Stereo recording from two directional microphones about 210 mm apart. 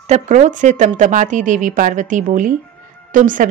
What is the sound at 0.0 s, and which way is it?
A woman's voice, 35° right (ahead or behind).